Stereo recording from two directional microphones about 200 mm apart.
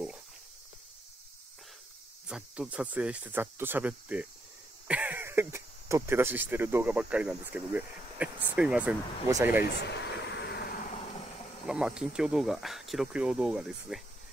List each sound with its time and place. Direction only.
2.2 s speech: 5° right (ahead or behind)
9.6 s a sound: 60° left (ahead or behind)
11.6 s speech: 5° right (ahead or behind)